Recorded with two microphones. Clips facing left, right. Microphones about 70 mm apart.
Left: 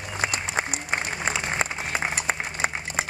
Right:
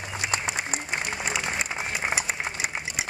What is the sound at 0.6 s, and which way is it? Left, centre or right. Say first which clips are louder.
Applause: left 3 dB; left.